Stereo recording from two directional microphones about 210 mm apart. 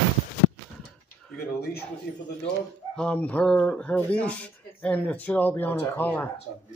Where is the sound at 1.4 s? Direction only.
50° left (ahead or behind).